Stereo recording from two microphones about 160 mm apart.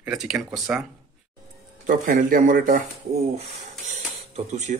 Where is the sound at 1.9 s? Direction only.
60° right (ahead or behind).